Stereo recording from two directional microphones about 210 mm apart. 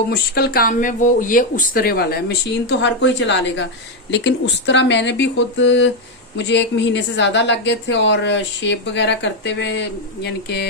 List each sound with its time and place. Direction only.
0.1 s speech: 50° left (ahead or behind)